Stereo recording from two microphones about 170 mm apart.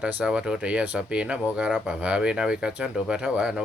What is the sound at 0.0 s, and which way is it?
Speech, 5° right (ahead or behind).